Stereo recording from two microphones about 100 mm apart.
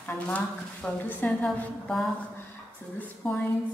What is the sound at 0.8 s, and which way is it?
Speech, 15° left (ahead or behind).